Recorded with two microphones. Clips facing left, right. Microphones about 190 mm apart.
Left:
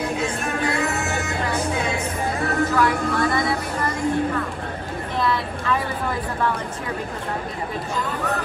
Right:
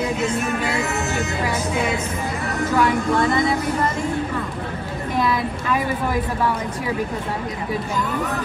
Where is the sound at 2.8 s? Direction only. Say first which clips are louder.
Right 2 dB; 20° right (ahead or behind).